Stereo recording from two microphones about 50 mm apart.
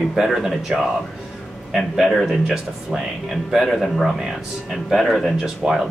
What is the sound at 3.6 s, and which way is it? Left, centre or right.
Speech, centre.